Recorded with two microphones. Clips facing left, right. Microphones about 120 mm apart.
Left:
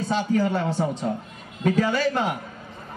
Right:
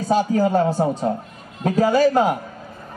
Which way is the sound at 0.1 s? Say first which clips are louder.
Right 6 dB; 40° right (ahead or behind).